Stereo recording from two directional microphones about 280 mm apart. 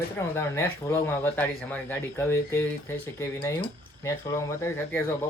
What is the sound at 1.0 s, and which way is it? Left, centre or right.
Speech, centre.